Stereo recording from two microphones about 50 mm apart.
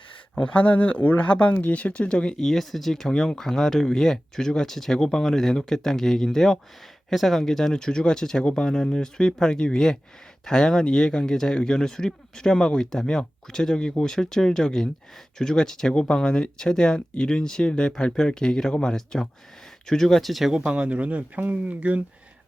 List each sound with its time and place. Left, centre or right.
0.3 s speech: left; by 20.5 s centre
20.7 s speech: right